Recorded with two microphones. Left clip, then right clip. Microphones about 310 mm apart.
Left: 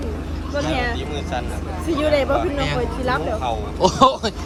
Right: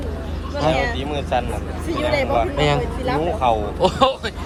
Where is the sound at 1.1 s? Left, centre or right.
Centre.